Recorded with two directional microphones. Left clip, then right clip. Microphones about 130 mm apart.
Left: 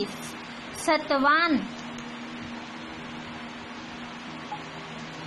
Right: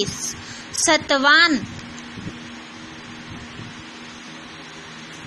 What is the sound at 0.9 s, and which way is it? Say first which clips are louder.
Speech: right 6 dB; 20° right (ahead or behind).